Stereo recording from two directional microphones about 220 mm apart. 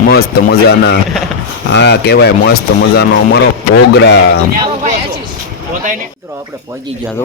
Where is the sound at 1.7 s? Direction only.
50° left (ahead or behind).